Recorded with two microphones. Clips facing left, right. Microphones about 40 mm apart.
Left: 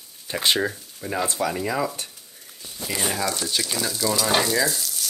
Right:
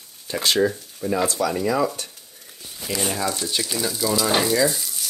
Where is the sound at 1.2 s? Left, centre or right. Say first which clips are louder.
Right 2 dB; left.